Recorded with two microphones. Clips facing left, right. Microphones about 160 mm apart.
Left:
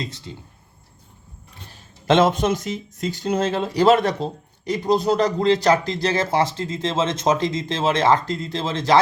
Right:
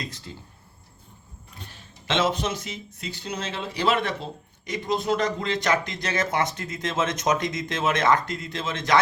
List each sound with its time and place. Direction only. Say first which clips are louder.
0.0 s speech: left 5 dB; 20° left (ahead or behind)
1.7 s speech: left 9 dB; 50° left (ahead or behind); by 9.0 s 30° left (ahead or behind)